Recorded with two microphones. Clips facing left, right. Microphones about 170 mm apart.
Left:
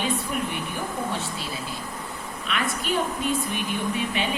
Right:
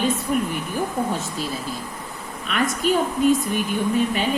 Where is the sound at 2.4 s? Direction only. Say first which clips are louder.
Right 5 dB; 45° right (ahead or behind).